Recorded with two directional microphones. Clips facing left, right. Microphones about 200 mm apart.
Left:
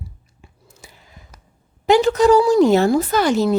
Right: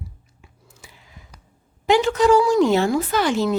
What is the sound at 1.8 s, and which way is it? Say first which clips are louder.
Speech: left 3 dB; 40° left (ahead or behind).